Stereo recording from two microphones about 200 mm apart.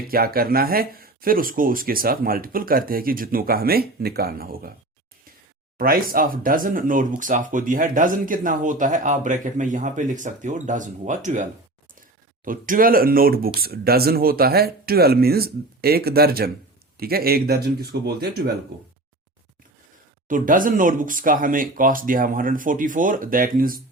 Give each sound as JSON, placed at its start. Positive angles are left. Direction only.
{"t": 0.1, "sound": "speech", "side_deg": -50}
{"t": 5.7, "sound": "speech", "side_deg": -45}
{"t": 12.5, "sound": "speech", "side_deg": -45}
{"t": 20.2, "sound": "speech", "side_deg": -40}